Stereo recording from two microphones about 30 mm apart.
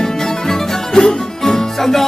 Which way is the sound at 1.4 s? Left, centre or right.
Centre.